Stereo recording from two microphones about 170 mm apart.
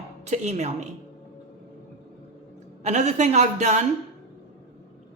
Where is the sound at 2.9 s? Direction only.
45° right (ahead or behind).